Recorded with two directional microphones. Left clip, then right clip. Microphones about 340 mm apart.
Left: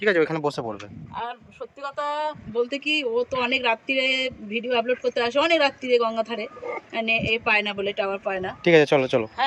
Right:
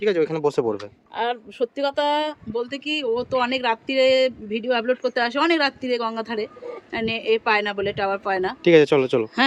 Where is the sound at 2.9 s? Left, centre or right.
Centre.